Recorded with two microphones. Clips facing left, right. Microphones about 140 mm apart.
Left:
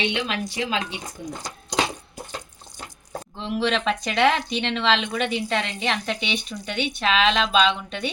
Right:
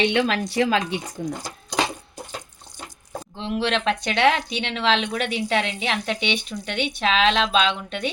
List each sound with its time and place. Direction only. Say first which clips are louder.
0.1 s a woman's voice: right 5 dB; 55° right (ahead or behind)
3.3 s speech: even; centre (ahead or behind)